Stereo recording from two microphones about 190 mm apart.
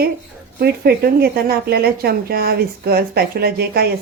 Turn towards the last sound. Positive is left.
turn(degrees=-55)  # may be behind; listen again after turning